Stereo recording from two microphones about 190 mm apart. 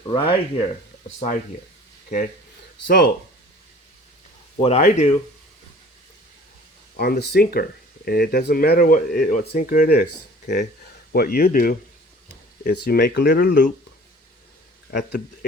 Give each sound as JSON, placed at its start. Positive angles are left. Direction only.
{"t": 0.0, "sound": "speech", "side_deg": 30}
{"t": 2.8, "sound": "speech", "side_deg": 55}
{"t": 4.6, "sound": "speech", "side_deg": 35}
{"t": 6.9, "sound": "speech", "side_deg": 55}
{"t": 11.1, "sound": "speech", "side_deg": 55}
{"t": 14.8, "sound": "a man's voice", "side_deg": 55}